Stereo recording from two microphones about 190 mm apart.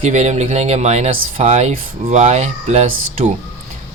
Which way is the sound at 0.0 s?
40° right (ahead or behind).